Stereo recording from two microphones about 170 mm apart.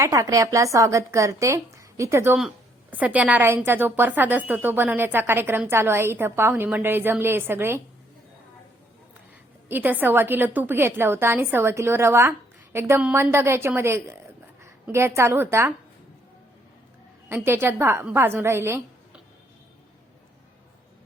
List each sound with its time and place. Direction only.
0.0 s a woman's voice: 20° right (ahead or behind)
9.6 s a woman's voice: 10° right (ahead or behind)
17.2 s a woman's voice: 15° right (ahead or behind)